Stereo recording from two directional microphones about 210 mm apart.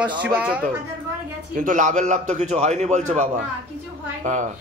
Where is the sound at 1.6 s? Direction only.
35° right (ahead or behind).